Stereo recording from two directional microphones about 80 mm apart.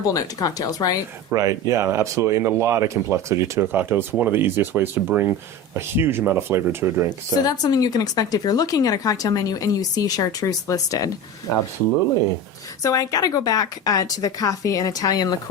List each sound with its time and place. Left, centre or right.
0.1 s speech: left
1.3 s speech: right
7.1 s speech: left
12.8 s speech: left